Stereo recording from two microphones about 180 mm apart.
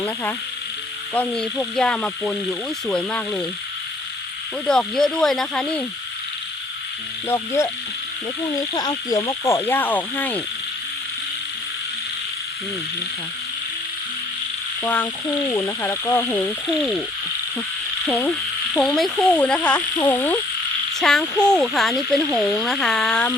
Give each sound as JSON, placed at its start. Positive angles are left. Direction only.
{"t": 1.1, "sound": "speech", "side_deg": 5}
{"t": 4.6, "sound": "speech", "side_deg": 5}
{"t": 7.3, "sound": "speech", "side_deg": 15}
{"t": 14.8, "sound": "speech", "side_deg": 10}
{"t": 16.6, "sound": "speech", "side_deg": 0}
{"t": 18.0, "sound": "speech", "side_deg": 10}